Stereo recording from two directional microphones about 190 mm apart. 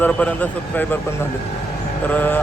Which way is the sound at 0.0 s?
5° left (ahead or behind).